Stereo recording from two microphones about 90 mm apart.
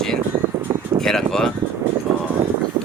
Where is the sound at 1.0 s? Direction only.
5° left (ahead or behind).